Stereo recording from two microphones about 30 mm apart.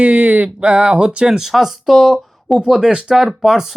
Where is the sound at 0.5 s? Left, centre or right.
Right.